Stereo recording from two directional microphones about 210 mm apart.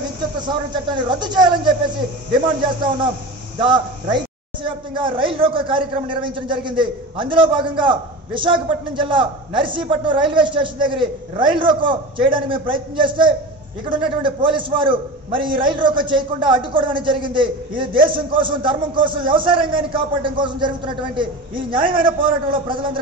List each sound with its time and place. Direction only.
0.4 s a man's voice: 20° right (ahead or behind)